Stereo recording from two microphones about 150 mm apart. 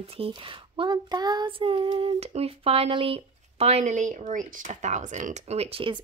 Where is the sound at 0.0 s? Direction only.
40° right (ahead or behind).